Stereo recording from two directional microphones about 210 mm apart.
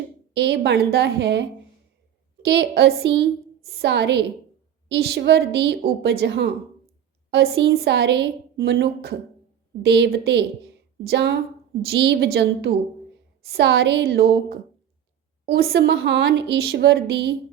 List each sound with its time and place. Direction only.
0.3 s a woman's voice: 55° right (ahead or behind)
15.4 s speech: 50° right (ahead or behind)